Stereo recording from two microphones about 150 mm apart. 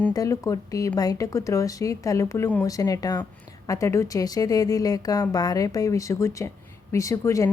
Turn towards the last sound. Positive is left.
turn(degrees=20)  # may be behind; listen again after turning